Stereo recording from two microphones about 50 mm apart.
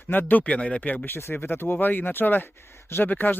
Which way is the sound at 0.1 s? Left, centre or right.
Left.